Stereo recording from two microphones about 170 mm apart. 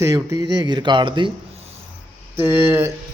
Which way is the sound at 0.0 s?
20° right (ahead or behind).